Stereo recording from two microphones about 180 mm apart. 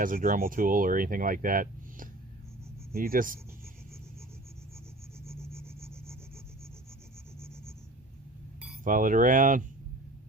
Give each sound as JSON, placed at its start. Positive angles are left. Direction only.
{"t": 0.0, "sound": "speech", "side_deg": -50}
{"t": 5.5, "sound": "a sound", "side_deg": -15}
{"t": 8.8, "sound": "speech", "side_deg": -50}